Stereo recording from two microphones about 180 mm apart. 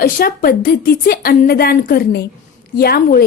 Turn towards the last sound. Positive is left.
turn(degrees=60)  # may be behind; listen again after turning